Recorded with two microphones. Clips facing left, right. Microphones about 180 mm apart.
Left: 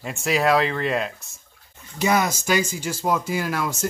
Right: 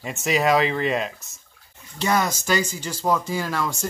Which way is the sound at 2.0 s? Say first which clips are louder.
Left 1 dB; 10° left (ahead or behind).